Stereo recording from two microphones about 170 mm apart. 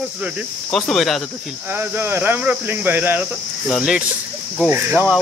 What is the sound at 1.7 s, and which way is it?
Speech, 10° right (ahead or behind).